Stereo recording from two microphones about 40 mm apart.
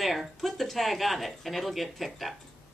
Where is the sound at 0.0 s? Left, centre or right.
Centre.